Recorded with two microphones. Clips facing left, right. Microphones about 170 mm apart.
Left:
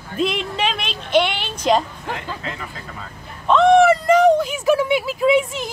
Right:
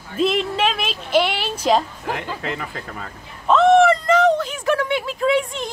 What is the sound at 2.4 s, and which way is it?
Speech, 65° right (ahead or behind).